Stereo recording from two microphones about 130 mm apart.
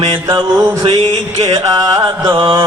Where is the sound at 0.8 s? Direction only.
45° right (ahead or behind).